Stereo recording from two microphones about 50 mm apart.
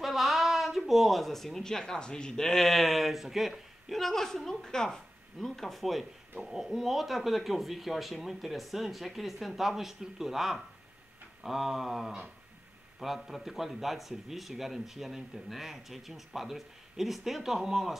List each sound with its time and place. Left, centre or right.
0.0 s a man's voice: centre